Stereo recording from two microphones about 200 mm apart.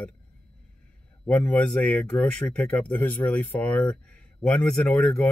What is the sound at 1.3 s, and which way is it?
Speech, 5° left (ahead or behind).